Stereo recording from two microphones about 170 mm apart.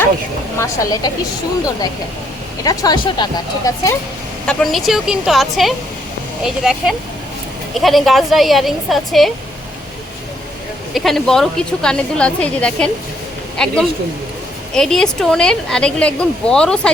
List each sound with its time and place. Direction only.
0.6 s speech: 20° left (ahead or behind)
2.6 s speech: 25° left (ahead or behind)
4.4 s speech: centre (ahead or behind)
10.9 s speech: centre (ahead or behind)
14.8 s speech: 5° left (ahead or behind)